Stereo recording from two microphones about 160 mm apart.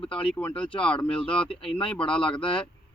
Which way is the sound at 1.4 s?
35° left (ahead or behind).